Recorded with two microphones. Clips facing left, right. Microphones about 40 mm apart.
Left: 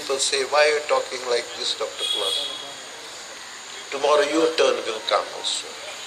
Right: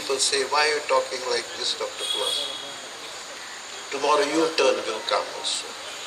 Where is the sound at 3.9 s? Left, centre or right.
Left.